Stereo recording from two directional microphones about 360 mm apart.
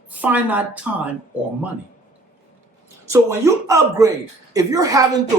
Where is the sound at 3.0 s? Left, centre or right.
Centre.